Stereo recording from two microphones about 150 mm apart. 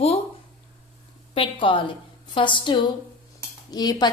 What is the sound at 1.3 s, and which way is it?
A woman's voice, 35° left (ahead or behind).